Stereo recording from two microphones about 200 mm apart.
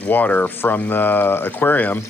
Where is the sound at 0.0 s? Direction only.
10° left (ahead or behind).